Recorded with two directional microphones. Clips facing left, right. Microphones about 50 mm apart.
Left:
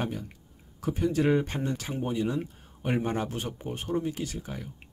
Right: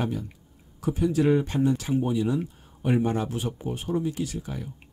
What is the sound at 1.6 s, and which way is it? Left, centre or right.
Speech, centre.